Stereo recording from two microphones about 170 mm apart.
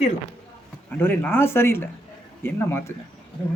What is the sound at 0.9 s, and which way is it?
Speech, 10° left (ahead or behind).